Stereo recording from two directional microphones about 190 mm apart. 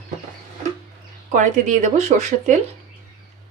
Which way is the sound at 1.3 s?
40° right (ahead or behind).